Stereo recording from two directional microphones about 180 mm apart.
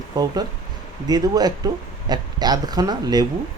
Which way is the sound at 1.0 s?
20° right (ahead or behind).